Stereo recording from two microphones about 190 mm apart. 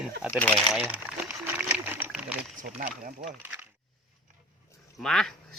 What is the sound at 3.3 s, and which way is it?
Speech, 10° right (ahead or behind).